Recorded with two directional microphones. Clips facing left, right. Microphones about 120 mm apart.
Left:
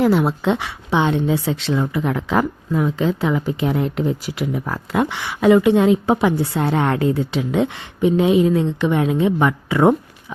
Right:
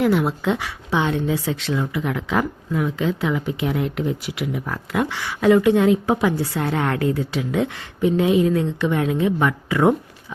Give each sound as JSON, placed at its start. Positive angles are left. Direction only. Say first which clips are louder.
{"t": 0.0, "sound": "a woman's voice", "louder": "left 3 dB", "side_deg": 30}
{"t": 5.0, "sound": "a woman's voice", "louder": "left 2 dB", "side_deg": 20}